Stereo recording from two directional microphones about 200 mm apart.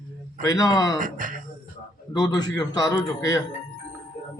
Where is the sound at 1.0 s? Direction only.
40° right (ahead or behind).